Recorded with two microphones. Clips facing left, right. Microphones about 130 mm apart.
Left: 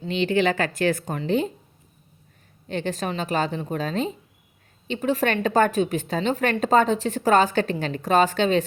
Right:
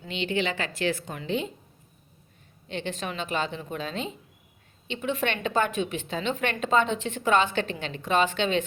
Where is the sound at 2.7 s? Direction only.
40° left (ahead or behind).